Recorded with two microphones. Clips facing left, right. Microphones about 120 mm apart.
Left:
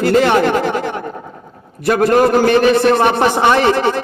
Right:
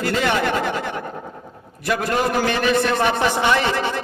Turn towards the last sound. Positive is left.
turn(degrees=55)  # may be behind; listen again after turning